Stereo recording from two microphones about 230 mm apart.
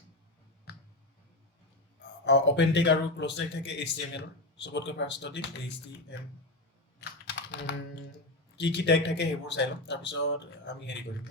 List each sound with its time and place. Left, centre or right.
2.2 s speech: left
7.3 s computer keyboard: left
8.5 s speech: left